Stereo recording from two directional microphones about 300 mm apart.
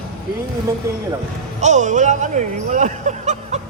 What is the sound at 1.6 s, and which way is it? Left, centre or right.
Speech, right.